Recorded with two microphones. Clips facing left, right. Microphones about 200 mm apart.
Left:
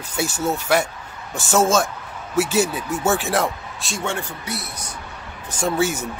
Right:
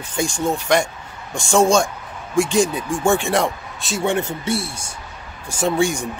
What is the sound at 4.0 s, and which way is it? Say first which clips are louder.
Speech: right 7 dB; 20° right (ahead or behind).